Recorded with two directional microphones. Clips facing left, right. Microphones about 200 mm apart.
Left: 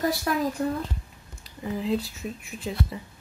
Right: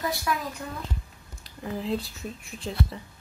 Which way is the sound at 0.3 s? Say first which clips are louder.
Left 1 dB; 40° left (ahead or behind).